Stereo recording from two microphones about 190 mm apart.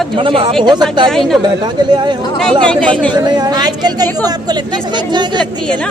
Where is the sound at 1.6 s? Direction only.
20° right (ahead or behind).